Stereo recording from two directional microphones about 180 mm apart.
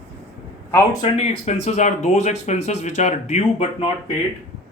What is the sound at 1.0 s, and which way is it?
Speech, 40° left (ahead or behind).